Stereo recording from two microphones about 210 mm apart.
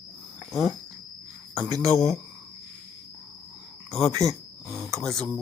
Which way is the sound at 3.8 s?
Centre (ahead or behind).